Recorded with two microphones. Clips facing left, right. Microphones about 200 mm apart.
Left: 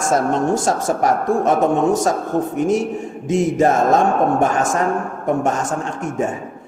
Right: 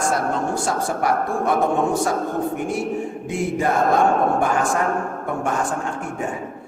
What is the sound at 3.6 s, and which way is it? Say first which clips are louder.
Speech: left 3 dB; 45° left (ahead or behind).